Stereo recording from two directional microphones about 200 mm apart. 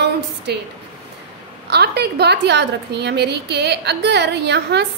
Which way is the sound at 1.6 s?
55° right (ahead or behind).